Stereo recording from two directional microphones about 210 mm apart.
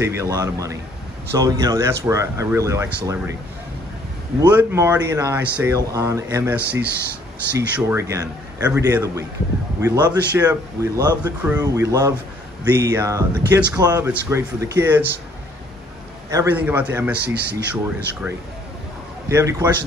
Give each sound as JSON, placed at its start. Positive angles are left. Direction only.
{"t": 0.0, "sound": "speech", "side_deg": -15}
{"t": 4.5, "sound": "speech", "side_deg": -10}
{"t": 16.3, "sound": "speech", "side_deg": -10}
{"t": 17.2, "sound": "speech", "side_deg": -55}
{"t": 19.2, "sound": "speech", "side_deg": -15}